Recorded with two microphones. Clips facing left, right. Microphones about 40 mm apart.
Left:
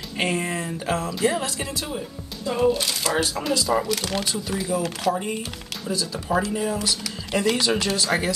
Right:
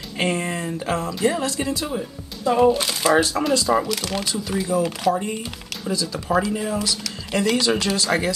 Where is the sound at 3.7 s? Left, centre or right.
Centre.